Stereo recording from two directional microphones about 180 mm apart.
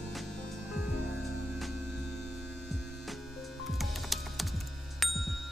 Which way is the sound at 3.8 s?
Centre (ahead or behind).